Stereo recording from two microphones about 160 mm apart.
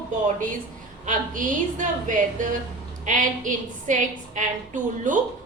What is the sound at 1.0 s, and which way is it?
A woman's voice, 55° right (ahead or behind).